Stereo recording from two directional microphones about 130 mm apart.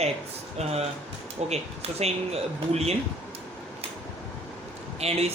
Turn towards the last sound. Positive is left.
turn(degrees=-50)  # may be behind; listen again after turning